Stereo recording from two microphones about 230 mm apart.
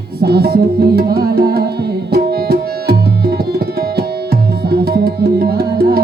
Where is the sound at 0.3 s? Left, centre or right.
Right.